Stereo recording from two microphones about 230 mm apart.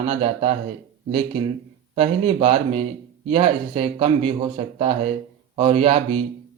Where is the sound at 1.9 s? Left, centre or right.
Right.